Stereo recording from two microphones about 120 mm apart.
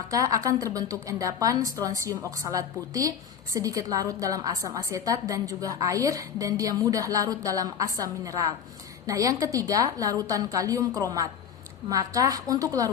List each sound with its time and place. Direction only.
0.1 s a woman's voice: 30° right (ahead or behind)